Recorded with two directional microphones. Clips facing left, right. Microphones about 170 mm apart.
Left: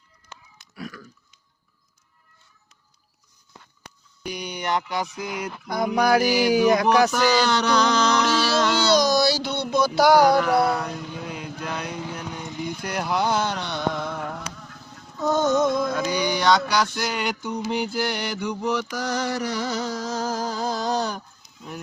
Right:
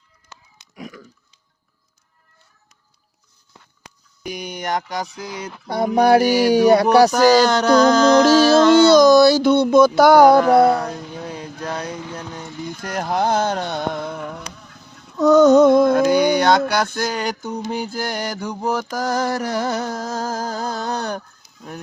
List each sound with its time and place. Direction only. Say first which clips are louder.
0.6 s pig: right 1 dB; 20° right (ahead or behind)
4.2 s music: right 2 dB; 50° right (ahead or behind)
5.3 s speech: right 2 dB; 30° right (ahead or behind)
6.9 s music: right 7 dB; 40° right (ahead or behind)
11.3 s mantra: right 5 dB; 40° right (ahead or behind)
12.8 s a sound: right 4 dB; 45° right (ahead or behind)
15.1 s a sound: right 10 dB; 75° right (ahead or behind); by 17.5 s 45° right (ahead or behind)
17.7 s mantra: left 1 dB; 45° right (ahead or behind)